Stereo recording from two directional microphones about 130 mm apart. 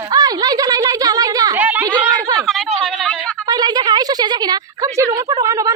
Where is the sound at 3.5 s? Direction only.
30° right (ahead or behind).